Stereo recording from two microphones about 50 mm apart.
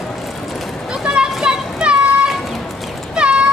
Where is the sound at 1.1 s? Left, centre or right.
Right.